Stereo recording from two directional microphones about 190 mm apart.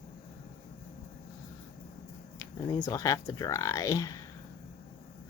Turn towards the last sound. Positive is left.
turn(degrees=15)  # may be behind; listen again after turning